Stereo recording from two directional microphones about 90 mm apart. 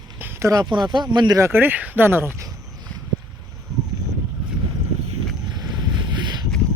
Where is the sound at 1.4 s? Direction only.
25° right (ahead or behind).